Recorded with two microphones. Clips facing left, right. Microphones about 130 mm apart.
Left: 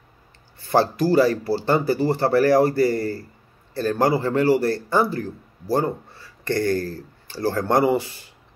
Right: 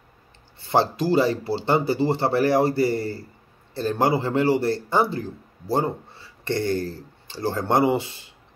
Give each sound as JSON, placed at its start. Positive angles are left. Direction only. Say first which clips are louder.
{"t": 0.6, "sound": "speech", "louder": "left 2 dB", "side_deg": -20}